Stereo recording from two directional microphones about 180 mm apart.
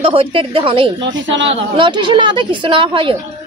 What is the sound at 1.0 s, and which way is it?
Speech, 90° right.